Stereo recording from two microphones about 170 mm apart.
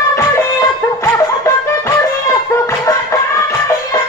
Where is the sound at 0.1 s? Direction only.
20° left (ahead or behind).